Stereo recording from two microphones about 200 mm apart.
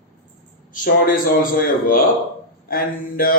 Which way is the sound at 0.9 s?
45° left (ahead or behind).